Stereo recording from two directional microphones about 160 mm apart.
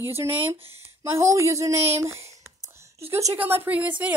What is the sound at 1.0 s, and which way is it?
A woman's voice, 20° right (ahead or behind).